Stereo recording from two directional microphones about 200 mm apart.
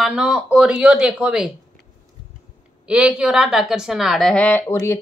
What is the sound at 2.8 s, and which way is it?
A woman's voice, 5° right (ahead or behind).